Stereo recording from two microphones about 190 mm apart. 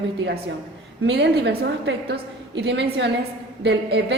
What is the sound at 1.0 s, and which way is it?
A woman's voice, 65° right (ahead or behind).